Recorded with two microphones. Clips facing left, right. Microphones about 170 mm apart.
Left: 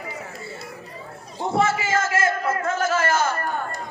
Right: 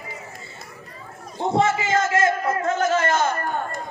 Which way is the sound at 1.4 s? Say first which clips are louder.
Right 1 dB; 20° right (ahead or behind).